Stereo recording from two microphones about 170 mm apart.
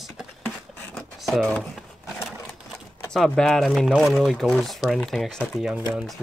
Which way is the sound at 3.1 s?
5° left (ahead or behind).